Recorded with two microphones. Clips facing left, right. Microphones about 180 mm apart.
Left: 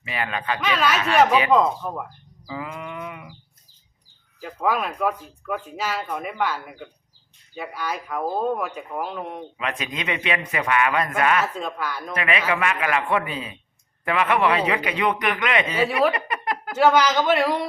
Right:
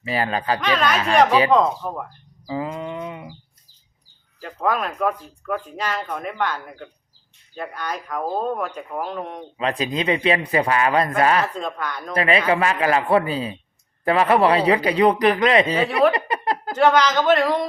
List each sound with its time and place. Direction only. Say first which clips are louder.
0.0 s a man's voice: right 5 dB; 35° right (ahead or behind)
0.6 s speech: even; 5° left (ahead or behind)
0.9 s a man's voice: right 2 dB; 35° right (ahead or behind)
1.5 s speech: right 1 dB; 5° left (ahead or behind)
2.5 s a sound: right 6 dB; 30° right (ahead or behind)
4.4 s a man's voice: right 1 dB; 5° left (ahead or behind)
9.6 s a man's voice: right 8 dB; 35° right (ahead or behind)
11.5 s speech: right 1 dB; 5° left (ahead or behind)
12.1 s a man's voice: right 6 dB; 35° right (ahead or behind)
16.1 s a sound: right 4 dB; 30° right (ahead or behind)
16.7 s a man's voice: right 1 dB; 5° left (ahead or behind)